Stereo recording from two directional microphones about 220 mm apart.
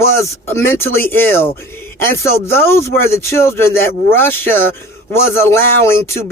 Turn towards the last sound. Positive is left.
turn(degrees=10)  # may be behind; listen again after turning